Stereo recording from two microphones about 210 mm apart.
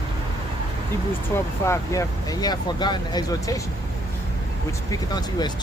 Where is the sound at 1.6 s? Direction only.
15° left (ahead or behind).